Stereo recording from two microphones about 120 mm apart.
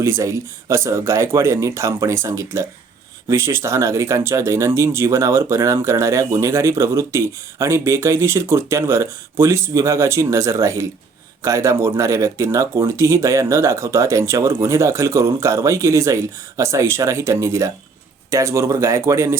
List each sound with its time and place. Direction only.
0.0 s speech: 25° right (ahead or behind)